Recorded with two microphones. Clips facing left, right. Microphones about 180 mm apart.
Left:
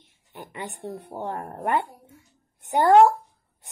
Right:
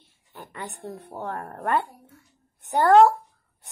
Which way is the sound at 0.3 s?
15° left (ahead or behind).